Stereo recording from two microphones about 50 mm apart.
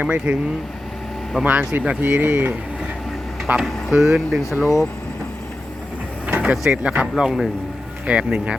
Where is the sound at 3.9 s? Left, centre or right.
Centre.